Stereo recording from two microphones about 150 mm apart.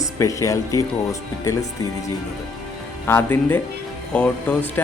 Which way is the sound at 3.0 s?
15° left (ahead or behind).